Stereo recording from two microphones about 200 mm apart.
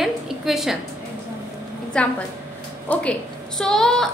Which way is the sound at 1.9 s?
5° left (ahead or behind).